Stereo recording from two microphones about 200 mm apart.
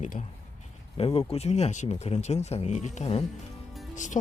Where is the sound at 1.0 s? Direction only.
30° left (ahead or behind).